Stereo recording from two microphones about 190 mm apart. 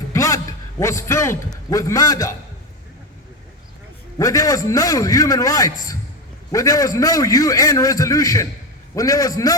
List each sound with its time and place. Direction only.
0.1 s a sound: 15° left (ahead or behind)
0.8 s a man's voice: 15° left (ahead or behind)
4.2 s a man's voice: 15° left (ahead or behind)